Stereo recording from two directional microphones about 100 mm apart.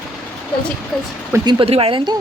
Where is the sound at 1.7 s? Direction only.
70° right (ahead or behind).